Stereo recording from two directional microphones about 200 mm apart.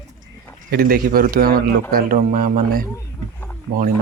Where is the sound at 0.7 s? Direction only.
50° right (ahead or behind).